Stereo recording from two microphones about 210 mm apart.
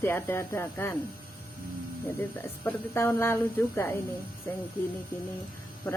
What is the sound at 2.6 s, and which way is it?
Speech, 10° left (ahead or behind).